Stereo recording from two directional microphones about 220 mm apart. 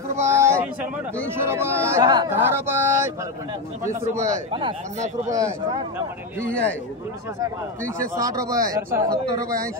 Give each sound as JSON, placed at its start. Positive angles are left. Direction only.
{"t": 0.2, "sound": "a sound", "side_deg": -10}
{"t": 1.3, "sound": "speech", "side_deg": -10}
{"t": 4.2, "sound": "speech", "side_deg": -25}
{"t": 8.2, "sound": "speech", "side_deg": -15}